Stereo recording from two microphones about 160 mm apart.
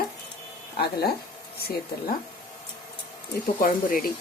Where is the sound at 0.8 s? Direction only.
80° left.